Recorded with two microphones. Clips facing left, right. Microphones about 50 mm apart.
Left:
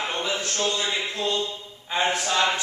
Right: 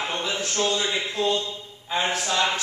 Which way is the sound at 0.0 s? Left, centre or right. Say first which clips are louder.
Even; centre.